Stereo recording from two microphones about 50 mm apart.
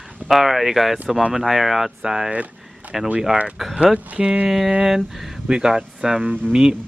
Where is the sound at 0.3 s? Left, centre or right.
Centre.